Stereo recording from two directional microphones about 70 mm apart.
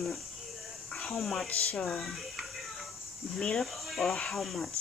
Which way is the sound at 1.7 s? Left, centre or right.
Centre.